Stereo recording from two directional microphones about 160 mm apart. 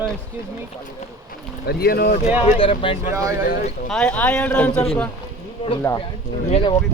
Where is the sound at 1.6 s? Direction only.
75° left (ahead or behind).